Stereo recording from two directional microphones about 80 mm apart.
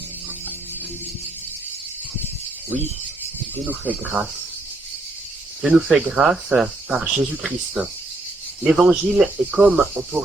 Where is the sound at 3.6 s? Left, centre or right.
Centre.